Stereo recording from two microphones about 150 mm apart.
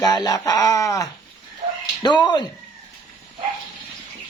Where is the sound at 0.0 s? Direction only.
25° left (ahead or behind).